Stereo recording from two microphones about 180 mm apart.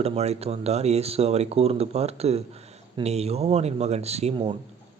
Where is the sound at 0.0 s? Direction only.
35° right (ahead or behind).